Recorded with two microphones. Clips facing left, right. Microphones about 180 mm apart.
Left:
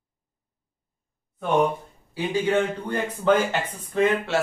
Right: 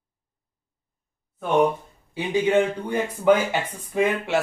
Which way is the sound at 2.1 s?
15° right (ahead or behind).